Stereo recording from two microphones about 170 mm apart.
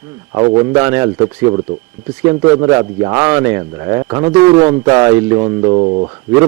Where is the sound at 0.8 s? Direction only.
15° right (ahead or behind).